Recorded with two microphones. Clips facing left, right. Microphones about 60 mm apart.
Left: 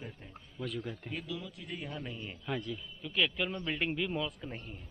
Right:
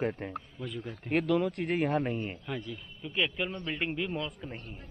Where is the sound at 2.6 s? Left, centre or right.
Centre.